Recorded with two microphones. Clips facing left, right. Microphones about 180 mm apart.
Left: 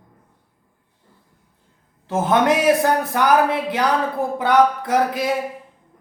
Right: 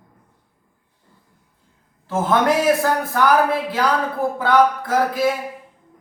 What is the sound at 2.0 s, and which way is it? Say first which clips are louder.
A man's voice: left 1 dB; 20° left (ahead or behind).